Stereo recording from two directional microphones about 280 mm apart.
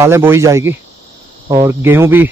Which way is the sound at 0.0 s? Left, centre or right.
Centre.